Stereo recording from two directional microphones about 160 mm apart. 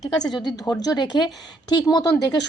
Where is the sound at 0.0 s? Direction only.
25° left (ahead or behind).